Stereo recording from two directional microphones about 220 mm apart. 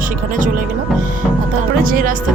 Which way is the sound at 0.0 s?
40° right (ahead or behind).